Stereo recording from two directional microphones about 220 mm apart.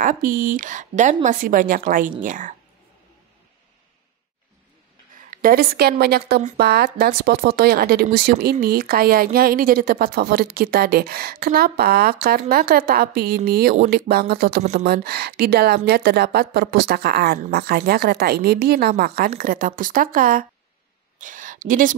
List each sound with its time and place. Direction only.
0.0 s speech: 40° right (ahead or behind)
5.1 s speech: 40° right (ahead or behind)
14.6 s speech: 30° right (ahead or behind)
14.9 s speech: 45° right (ahead or behind)
21.2 s a sound: 35° right (ahead or behind)